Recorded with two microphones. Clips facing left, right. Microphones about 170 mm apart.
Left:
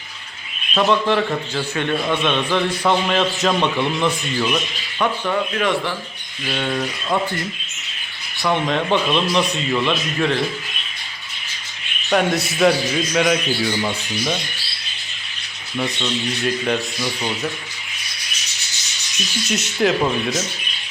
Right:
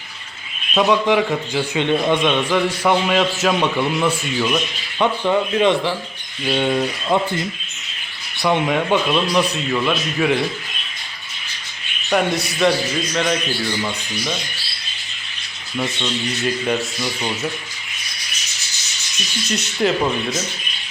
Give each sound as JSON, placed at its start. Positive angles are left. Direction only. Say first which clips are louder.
{"t": 0.7, "sound": "a man's voice", "louder": "right 1 dB", "side_deg": -10}
{"t": 4.9, "sound": "a man's voice", "louder": "right 3 dB", "side_deg": -20}
{"t": 12.1, "sound": "a man's voice", "louder": "left 1 dB", "side_deg": 0}
{"t": 15.8, "sound": "a man's voice", "louder": "even", "side_deg": -5}
{"t": 19.5, "sound": "a man's voice", "louder": "even", "side_deg": 0}